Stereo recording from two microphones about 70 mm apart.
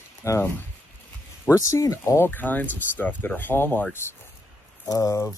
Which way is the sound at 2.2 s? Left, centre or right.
Left.